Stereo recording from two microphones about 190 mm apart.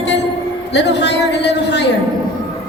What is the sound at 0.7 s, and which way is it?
A man's voice, 65° left (ahead or behind).